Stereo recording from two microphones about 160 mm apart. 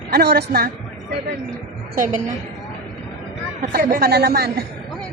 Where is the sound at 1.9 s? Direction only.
55° right (ahead or behind).